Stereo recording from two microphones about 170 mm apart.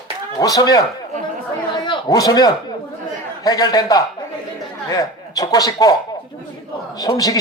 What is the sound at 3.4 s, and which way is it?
A man's voice, 25° left (ahead or behind).